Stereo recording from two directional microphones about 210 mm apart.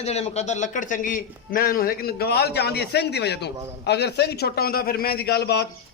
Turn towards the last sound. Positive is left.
turn(degrees=50)  # may be behind; listen again after turning